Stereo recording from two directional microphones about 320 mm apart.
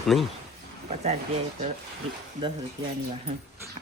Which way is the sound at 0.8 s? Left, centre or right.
Right.